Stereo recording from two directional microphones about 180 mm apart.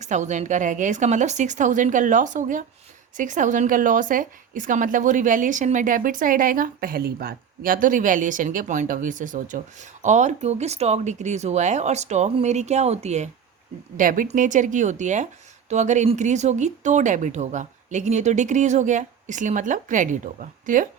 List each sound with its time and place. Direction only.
0.0 s a woman's voice: 40° right (ahead or behind)